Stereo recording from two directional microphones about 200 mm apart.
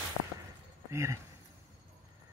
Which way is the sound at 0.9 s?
15° right (ahead or behind).